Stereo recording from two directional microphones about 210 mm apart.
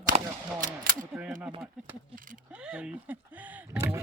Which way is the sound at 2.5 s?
5° right (ahead or behind).